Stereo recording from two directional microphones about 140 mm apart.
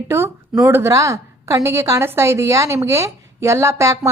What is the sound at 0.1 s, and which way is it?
Speech, 20° right (ahead or behind).